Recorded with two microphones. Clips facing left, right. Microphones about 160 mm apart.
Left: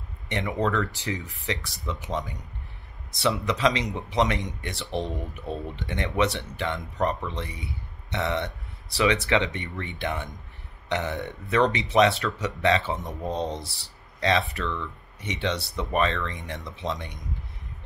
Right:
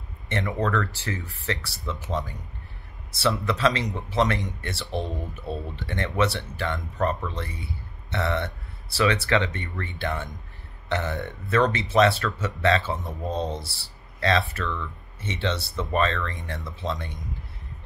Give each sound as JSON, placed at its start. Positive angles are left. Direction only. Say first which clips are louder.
{"t": 0.3, "sound": "speech", "louder": "even", "side_deg": 20}